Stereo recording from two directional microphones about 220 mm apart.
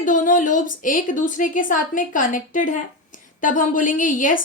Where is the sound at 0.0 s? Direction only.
35° left (ahead or behind).